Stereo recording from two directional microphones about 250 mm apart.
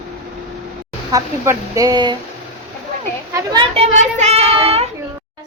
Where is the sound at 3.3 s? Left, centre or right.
Centre.